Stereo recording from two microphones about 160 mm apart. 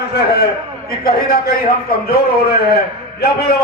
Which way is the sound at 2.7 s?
85° left.